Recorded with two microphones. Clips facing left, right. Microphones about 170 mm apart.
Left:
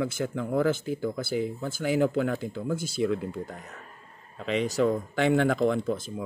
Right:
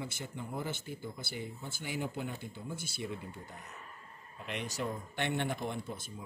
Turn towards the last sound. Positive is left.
turn(degrees=90)